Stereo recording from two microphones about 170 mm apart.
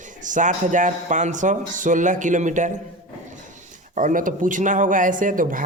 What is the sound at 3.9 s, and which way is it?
Speech, 50° right (ahead or behind).